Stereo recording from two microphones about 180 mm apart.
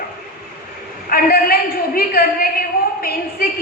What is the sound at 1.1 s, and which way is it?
A woman's voice, 55° left (ahead or behind).